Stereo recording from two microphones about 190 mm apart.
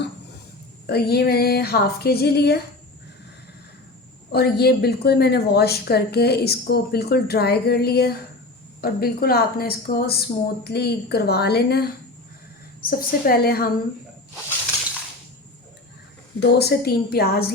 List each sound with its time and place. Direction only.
0.9 s a woman's voice: 55° left (ahead or behind)
4.3 s a woman's voice: 55° left (ahead or behind)
16.4 s a woman's voice: 60° left (ahead or behind)